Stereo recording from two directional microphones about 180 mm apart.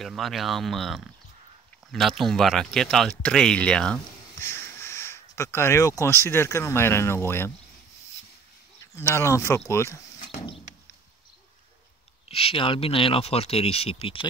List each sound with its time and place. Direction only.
0.0 s speech: centre (ahead or behind)
8.9 s speech: 15° left (ahead or behind)
10.1 s a sound: 35° left (ahead or behind)
12.3 s speech: 30° left (ahead or behind)